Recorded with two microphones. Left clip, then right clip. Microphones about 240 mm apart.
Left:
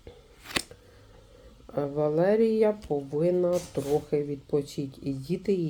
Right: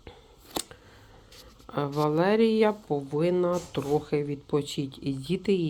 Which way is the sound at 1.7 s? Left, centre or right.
Right.